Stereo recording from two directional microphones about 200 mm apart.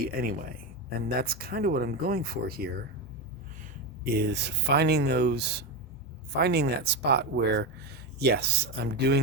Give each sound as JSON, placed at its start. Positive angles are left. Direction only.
{"t": 0.0, "sound": "speech", "side_deg": -45}
{"t": 4.0, "sound": "speech", "side_deg": -55}